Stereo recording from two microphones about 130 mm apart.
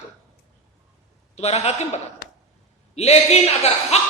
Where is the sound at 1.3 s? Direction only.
55° left (ahead or behind).